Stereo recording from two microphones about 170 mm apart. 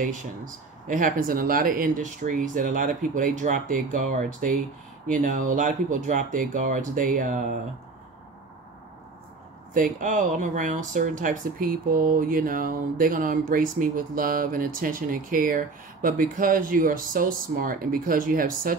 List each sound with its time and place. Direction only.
0.0 s speech: 50° right (ahead or behind)
9.9 s speech: 50° right (ahead or behind)